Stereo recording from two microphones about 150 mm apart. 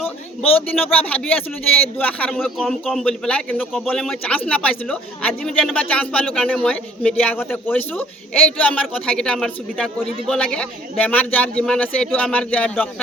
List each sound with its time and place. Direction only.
0.7 s speech: 10° left (ahead or behind)